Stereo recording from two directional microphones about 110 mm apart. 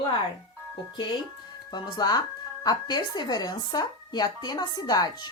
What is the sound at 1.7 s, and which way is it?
Speech, 40° left (ahead or behind).